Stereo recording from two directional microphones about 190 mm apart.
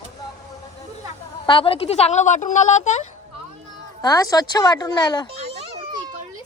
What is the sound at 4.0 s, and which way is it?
A woman's voice, 20° left (ahead or behind).